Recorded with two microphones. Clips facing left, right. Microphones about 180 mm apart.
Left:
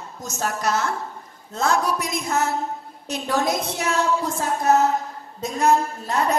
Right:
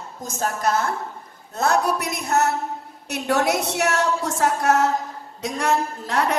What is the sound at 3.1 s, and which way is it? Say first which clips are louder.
A woman's voice: right 2 dB; 70° right (ahead or behind).